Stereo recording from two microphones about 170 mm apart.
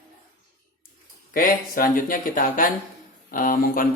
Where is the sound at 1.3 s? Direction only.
55° left (ahead or behind).